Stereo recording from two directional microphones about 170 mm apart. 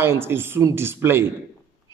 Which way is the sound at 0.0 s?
15° right (ahead or behind).